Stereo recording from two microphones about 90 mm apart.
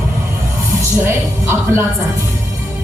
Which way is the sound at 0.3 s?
35° right (ahead or behind).